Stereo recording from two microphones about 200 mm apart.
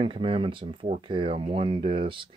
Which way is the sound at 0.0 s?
25° right (ahead or behind).